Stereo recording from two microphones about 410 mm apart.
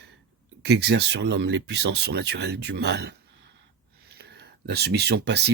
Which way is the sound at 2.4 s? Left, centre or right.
Right.